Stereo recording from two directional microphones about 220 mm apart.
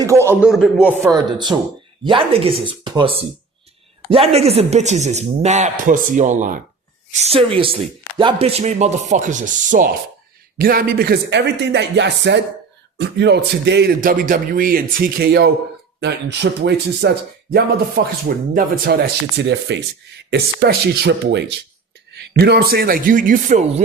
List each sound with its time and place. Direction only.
0.0 s a man's voice: 15° right (ahead or behind); by 23.8 s 35° right (ahead or behind)